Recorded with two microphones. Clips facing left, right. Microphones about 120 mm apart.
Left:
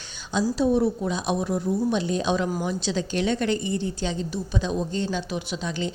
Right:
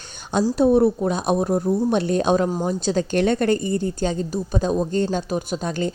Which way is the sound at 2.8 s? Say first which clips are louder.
Right 6 dB; 50° right (ahead or behind).